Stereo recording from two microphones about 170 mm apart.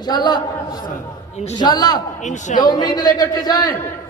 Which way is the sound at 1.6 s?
25° left (ahead or behind).